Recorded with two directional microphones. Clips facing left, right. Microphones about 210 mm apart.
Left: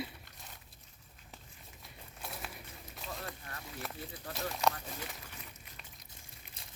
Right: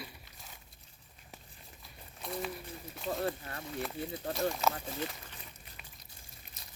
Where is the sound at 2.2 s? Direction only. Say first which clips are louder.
Right 8 dB; 5° left (ahead or behind).